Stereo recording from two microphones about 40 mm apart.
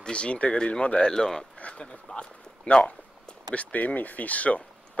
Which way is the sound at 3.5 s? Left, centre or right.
Left.